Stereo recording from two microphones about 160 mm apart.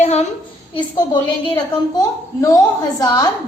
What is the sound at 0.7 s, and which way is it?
Speech, 30° left (ahead or behind).